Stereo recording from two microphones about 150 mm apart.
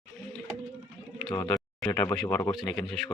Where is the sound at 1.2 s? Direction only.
25° left (ahead or behind).